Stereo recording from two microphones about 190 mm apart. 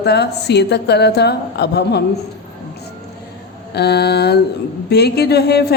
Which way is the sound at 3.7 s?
60° left (ahead or behind).